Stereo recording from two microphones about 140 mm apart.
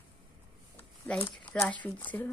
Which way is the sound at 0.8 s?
5° left (ahead or behind).